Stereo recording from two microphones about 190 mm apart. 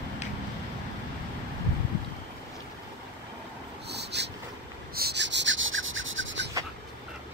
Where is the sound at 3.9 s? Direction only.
65° right (ahead or behind).